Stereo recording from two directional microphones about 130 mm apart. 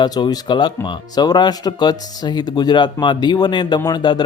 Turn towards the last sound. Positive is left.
turn(degrees=35)  # may be behind; listen again after turning